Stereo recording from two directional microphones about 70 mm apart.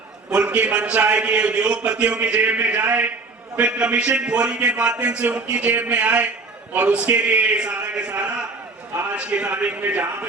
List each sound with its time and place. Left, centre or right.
0.3 s a man's voice: centre